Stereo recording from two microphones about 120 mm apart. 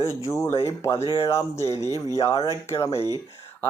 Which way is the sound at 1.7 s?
30° right (ahead or behind).